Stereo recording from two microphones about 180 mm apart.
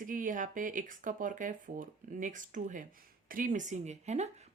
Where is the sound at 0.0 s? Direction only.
45° right (ahead or behind).